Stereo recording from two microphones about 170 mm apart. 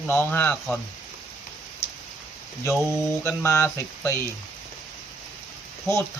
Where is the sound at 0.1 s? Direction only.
10° left (ahead or behind).